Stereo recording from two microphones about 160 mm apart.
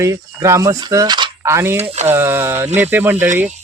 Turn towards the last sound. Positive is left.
turn(degrees=-10)  # may be behind; listen again after turning